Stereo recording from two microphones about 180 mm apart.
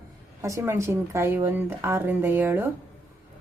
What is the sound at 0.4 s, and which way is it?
Speech, 15° right (ahead or behind).